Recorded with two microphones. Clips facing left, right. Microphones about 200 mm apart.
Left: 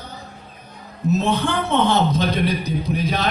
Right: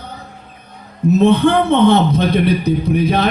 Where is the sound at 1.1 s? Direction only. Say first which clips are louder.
Right 10 dB; 60° right (ahead or behind).